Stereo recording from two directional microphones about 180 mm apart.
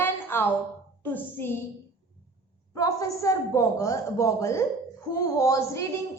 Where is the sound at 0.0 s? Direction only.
10° left (ahead or behind).